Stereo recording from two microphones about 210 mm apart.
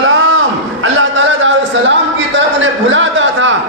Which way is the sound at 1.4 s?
60° right (ahead or behind).